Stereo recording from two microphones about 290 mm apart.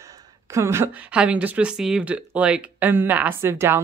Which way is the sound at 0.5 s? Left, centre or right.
Centre.